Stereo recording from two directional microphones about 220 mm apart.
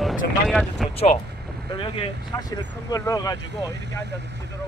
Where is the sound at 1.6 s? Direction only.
20° left (ahead or behind).